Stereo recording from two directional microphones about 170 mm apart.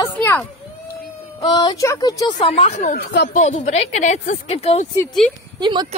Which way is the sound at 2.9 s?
90° left.